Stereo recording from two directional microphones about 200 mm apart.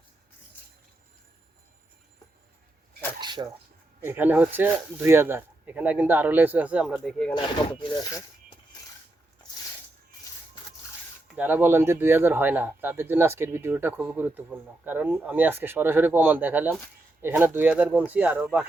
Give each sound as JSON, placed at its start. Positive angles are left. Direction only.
{"t": 3.2, "sound": "a sound", "side_deg": -20}
{"t": 4.0, "sound": "speech", "side_deg": -10}
{"t": 7.3, "sound": "speech", "side_deg": 25}
{"t": 11.3, "sound": "speech", "side_deg": -10}